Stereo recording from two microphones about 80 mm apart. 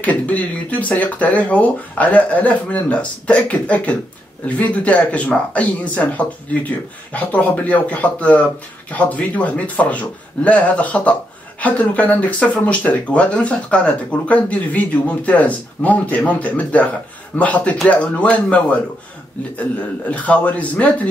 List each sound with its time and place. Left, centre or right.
0.0 s speech: centre
20.1 s speech: centre